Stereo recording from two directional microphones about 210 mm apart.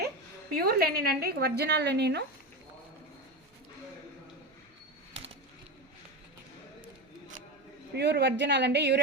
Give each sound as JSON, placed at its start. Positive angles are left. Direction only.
{"t": 0.5, "sound": "a woman's voice", "side_deg": -45}
{"t": 7.9, "sound": "a woman's voice", "side_deg": -55}